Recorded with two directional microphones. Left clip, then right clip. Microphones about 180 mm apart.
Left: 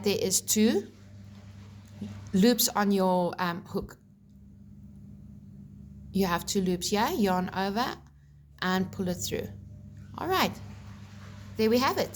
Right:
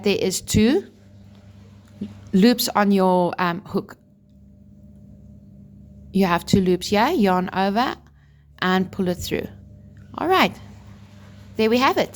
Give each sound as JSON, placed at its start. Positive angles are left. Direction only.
{"t": 0.0, "sound": "a woman's voice", "side_deg": -50}
{"t": 2.3, "sound": "a woman's voice", "side_deg": -50}
{"t": 6.1, "sound": "a woman's voice", "side_deg": -50}